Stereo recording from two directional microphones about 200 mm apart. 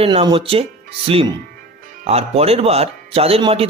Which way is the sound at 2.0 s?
30° right (ahead or behind).